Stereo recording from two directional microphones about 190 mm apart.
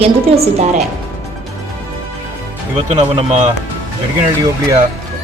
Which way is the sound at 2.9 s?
30° right (ahead or behind).